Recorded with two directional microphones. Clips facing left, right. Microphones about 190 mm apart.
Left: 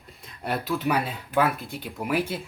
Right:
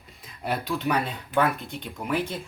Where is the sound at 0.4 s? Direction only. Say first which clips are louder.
Left 1 dB; centre (ahead or behind).